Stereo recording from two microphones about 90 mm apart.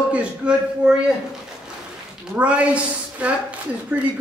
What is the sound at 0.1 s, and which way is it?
Speech, 15° right (ahead or behind).